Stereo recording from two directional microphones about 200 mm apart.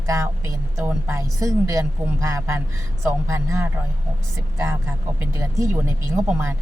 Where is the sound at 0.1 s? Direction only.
15° right (ahead or behind).